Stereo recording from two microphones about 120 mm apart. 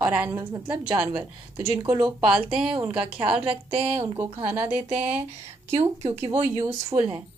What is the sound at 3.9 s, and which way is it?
Speech, 50° right (ahead or behind).